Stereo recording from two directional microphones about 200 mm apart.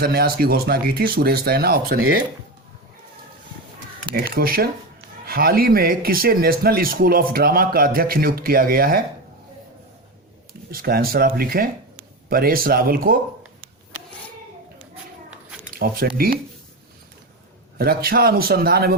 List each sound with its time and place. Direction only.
0.0 s speech: 50° right (ahead or behind)
4.1 s speech: 50° right (ahead or behind)
10.7 s speech: 50° right (ahead or behind)
15.7 s speech: 50° right (ahead or behind)
17.7 s speech: 50° right (ahead or behind)